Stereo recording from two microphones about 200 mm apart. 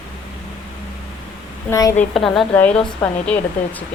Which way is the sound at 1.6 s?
15° left (ahead or behind).